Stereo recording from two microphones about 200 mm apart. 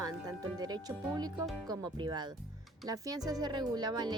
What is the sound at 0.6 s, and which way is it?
Speech, 20° right (ahead or behind).